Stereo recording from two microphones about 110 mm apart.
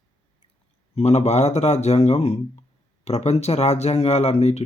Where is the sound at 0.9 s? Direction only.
80° left.